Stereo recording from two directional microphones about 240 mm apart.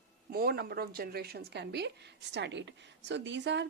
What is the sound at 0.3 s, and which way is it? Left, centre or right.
Speech, right.